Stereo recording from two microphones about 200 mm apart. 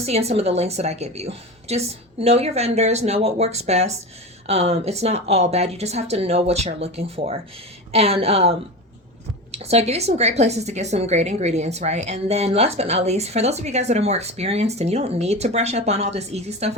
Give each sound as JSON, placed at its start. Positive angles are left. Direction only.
{"t": 0.0, "sound": "a woman's voice", "side_deg": -30}